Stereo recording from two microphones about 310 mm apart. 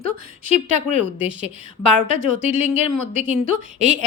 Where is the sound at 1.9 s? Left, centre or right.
Right.